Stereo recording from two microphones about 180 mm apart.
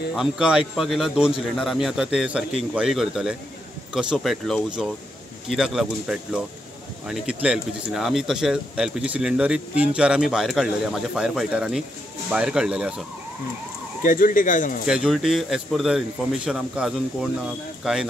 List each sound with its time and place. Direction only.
0.1 s speech: 5° right (ahead or behind)
14.0 s speech: 50° left (ahead or behind)
14.9 s speech: 5° right (ahead or behind)